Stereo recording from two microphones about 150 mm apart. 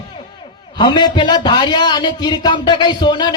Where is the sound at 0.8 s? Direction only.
30° left (ahead or behind).